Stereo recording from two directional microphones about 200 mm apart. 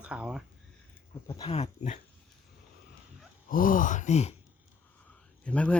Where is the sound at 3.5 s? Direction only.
45° left (ahead or behind).